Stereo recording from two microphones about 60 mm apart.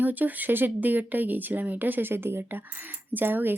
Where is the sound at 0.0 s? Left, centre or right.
Right.